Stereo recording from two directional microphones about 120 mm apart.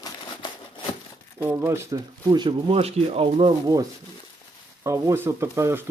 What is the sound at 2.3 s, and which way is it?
Speech, 40° right (ahead or behind).